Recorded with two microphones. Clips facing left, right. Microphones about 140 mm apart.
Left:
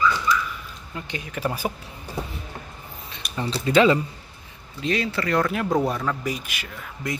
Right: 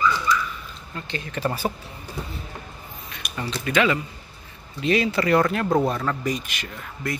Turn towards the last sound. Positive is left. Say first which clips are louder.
# right 1 dB
turn(degrees=20)  # may be behind; listen again after turning